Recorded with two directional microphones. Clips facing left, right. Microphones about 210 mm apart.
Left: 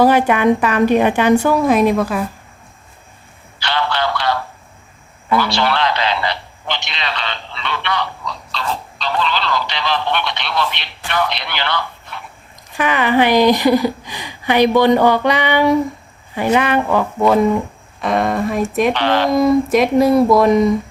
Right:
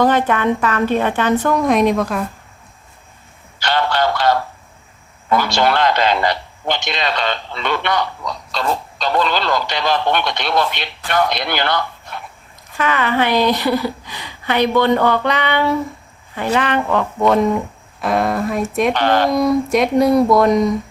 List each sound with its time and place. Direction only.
0.0 s a woman's voice: 10° left (ahead or behind)
3.6 s a sound: 45° right (ahead or behind)
5.4 s a man's voice: 45° right (ahead or behind)
12.7 s a woman's voice: 15° left (ahead or behind)
18.9 s a man's voice: 45° right (ahead or behind)
19.3 s speech: centre (ahead or behind)